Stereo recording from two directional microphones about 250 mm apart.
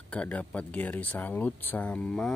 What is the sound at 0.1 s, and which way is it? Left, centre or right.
Speech, centre.